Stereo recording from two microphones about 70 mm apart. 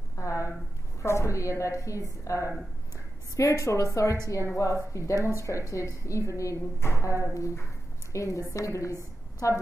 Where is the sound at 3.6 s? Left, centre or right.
Left.